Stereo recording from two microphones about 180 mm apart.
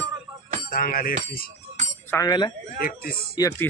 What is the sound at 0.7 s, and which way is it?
Speech, 50° left (ahead or behind).